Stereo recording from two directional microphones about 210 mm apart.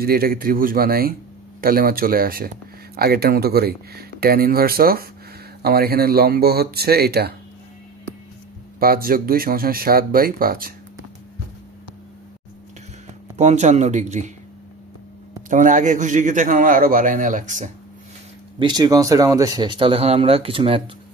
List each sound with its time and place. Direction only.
0.0 s speech: 45° right (ahead or behind)
8.7 s speech: 45° right (ahead or behind)
13.4 s a man's voice: 35° right (ahead or behind)
15.5 s a man's voice: 35° right (ahead or behind)
18.6 s speech: 20° right (ahead or behind)